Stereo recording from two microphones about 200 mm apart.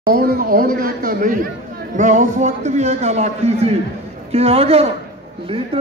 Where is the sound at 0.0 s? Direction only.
45° right (ahead or behind).